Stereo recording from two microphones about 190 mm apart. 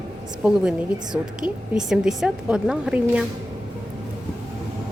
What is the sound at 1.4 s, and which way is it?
A woman's voice, 5° right (ahead or behind).